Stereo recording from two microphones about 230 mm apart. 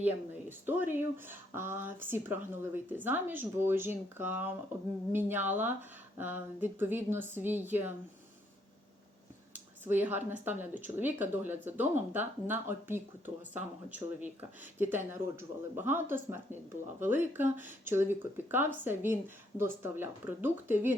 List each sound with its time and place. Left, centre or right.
0.0 s speech: centre
9.8 s speech: centre